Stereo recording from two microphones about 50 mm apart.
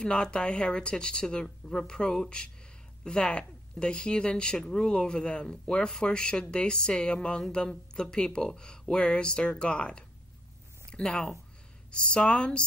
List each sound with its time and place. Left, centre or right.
0.0 s speech: centre